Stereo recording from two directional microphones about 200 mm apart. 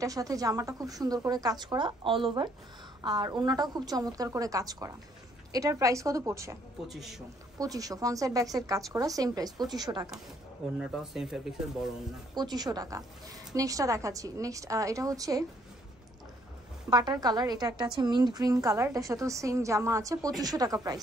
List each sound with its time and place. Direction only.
0.0 s a woman's voice: 15° right (ahead or behind)
6.9 s speech: centre (ahead or behind)
7.5 s a woman's voice: 20° right (ahead or behind)
10.8 s speech: centre (ahead or behind)
12.4 s a woman's voice: 20° right (ahead or behind)
16.9 s a woman's voice: 20° right (ahead or behind)